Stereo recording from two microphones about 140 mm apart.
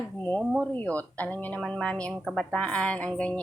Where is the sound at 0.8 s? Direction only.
10° left (ahead or behind).